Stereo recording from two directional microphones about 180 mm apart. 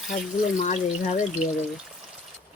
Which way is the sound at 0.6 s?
45° left (ahead or behind).